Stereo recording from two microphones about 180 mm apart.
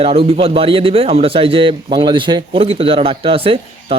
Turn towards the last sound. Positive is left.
turn(degrees=-30)  # may be behind; listen again after turning